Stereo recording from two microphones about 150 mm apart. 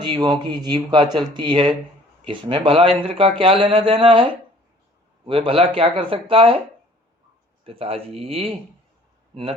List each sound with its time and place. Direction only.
0.0 s speech: 30° right (ahead or behind)
7.6 s speech: 40° right (ahead or behind)